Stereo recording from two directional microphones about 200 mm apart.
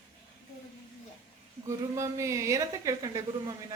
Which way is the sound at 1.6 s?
15° right (ahead or behind).